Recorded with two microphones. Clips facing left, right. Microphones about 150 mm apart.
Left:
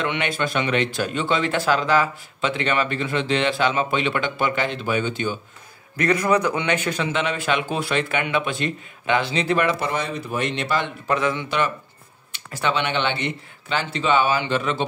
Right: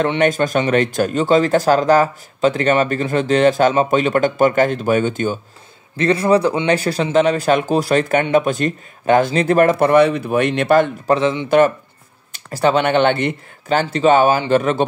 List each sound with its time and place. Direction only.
0.0 s speech: 40° right (ahead or behind)
5.9 s speech: 30° right (ahead or behind); by 10.9 s 55° right (ahead or behind)
11.1 s speech: 25° right (ahead or behind)
11.4 s speech: 50° right (ahead or behind)